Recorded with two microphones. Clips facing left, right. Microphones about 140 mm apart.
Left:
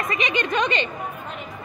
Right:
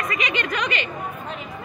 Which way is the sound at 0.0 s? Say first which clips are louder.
Left 1 dB; 25° left (ahead or behind).